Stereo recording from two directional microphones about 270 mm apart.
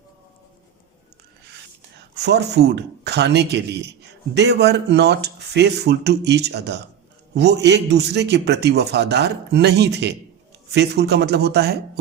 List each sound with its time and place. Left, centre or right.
2.0 s a man's voice: right